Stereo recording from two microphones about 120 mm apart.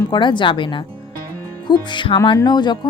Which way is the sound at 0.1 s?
40° left (ahead or behind).